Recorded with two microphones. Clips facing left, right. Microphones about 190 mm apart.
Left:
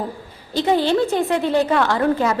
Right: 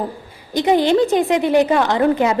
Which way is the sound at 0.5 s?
15° right (ahead or behind).